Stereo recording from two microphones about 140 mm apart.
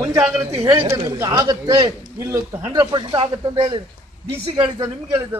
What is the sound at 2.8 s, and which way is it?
Speech, 35° right (ahead or behind).